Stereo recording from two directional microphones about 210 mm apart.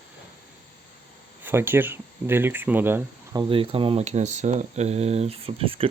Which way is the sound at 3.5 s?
25° right (ahead or behind).